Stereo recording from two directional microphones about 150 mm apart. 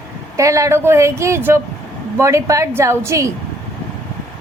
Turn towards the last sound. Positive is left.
turn(degrees=-20)  # may be behind; listen again after turning